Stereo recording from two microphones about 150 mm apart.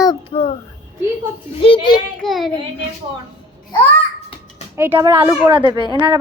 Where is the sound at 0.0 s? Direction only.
35° left (ahead or behind).